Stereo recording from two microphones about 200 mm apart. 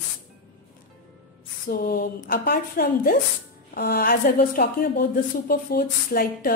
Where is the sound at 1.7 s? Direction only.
45° left (ahead or behind).